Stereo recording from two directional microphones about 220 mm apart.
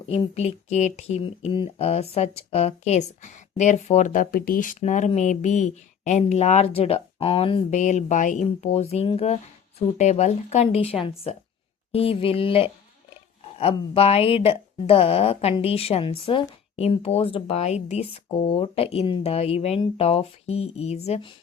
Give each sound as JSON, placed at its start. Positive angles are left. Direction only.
{"t": 0.1, "sound": "a woman's voice", "side_deg": 25}